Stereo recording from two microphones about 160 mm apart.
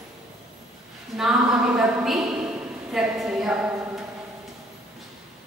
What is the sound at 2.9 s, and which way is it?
Speech, 5° right (ahead or behind).